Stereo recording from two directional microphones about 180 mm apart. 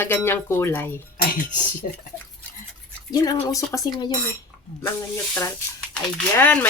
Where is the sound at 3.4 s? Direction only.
20° left (ahead or behind).